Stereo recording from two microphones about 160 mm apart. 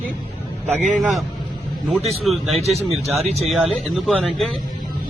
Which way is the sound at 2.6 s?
40° right (ahead or behind).